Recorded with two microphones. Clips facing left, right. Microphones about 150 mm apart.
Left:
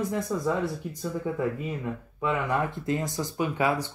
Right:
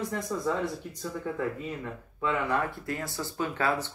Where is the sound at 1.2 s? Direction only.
15° left (ahead or behind).